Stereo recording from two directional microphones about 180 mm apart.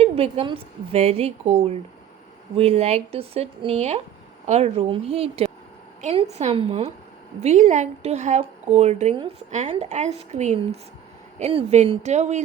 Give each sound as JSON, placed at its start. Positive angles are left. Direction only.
{"t": 0.0, "sound": "a woman's voice", "side_deg": -35}